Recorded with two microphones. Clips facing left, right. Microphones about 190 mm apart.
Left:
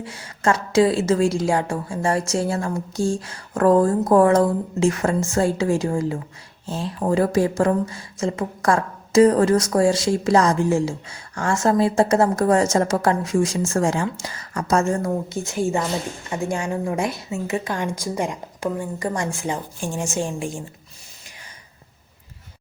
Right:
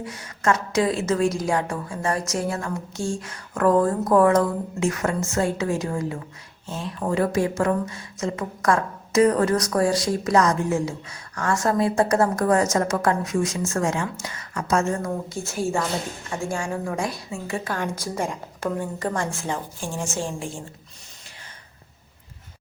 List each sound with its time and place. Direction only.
0.0 s speech: 30° left (ahead or behind)
15.4 s a woman's voice: 15° left (ahead or behind)